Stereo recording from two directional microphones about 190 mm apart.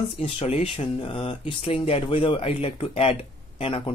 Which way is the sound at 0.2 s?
30° left (ahead or behind).